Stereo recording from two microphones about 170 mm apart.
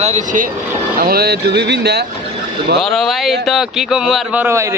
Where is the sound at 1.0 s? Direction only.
65° right (ahead or behind).